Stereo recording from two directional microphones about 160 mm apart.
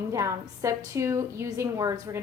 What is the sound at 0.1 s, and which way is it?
A woman's voice, 20° right (ahead or behind).